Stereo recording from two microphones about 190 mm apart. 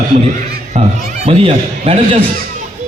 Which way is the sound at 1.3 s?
30° right (ahead or behind).